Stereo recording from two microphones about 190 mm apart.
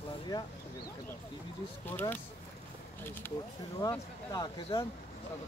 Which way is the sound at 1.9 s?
10° left (ahead or behind).